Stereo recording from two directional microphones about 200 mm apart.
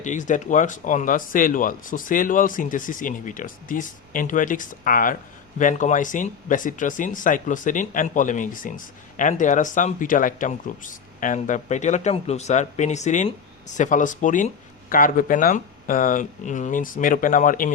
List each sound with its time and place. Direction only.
0.0 s speech: 40° left (ahead or behind)